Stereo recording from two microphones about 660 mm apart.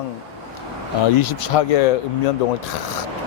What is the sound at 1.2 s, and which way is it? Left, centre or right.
Speech, left.